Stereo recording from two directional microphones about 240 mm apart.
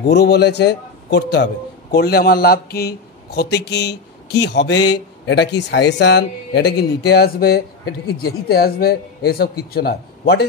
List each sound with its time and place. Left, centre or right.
0.1 s a man's voice: left